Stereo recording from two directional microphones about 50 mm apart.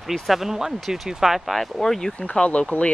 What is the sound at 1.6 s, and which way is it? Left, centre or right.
Speech, centre.